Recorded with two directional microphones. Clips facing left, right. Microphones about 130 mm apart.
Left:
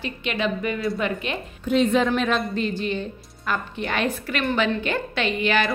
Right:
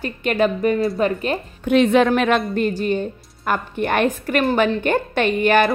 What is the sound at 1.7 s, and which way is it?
Speech, 65° right (ahead or behind).